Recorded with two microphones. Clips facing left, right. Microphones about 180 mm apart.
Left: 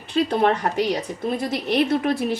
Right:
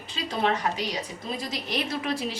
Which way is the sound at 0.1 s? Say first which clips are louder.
Left 8 dB; 60° left (ahead or behind).